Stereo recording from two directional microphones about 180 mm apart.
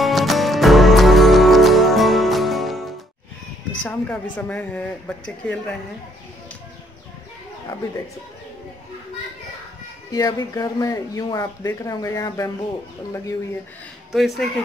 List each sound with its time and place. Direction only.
0.0 s music: centre (ahead or behind)
3.8 s a woman's voice: 10° left (ahead or behind)
10.1 s speech: 20° left (ahead or behind)
14.1 s speech: centre (ahead or behind)